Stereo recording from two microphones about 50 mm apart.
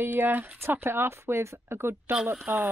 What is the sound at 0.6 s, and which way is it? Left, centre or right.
Speech, right.